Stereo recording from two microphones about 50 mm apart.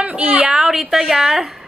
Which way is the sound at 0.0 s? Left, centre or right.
Right.